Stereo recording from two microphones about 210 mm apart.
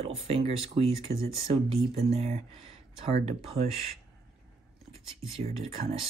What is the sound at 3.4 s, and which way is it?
Speech, 30° right (ahead or behind).